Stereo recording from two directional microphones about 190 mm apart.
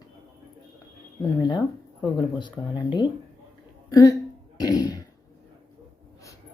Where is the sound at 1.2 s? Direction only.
20° left (ahead or behind).